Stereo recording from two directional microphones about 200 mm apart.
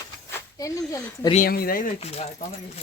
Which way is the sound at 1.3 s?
45° left (ahead or behind).